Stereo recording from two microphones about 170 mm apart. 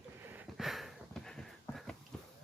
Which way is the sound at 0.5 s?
Centre (ahead or behind).